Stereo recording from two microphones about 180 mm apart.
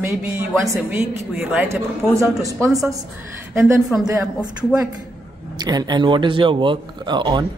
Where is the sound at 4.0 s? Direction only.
15° right (ahead or behind).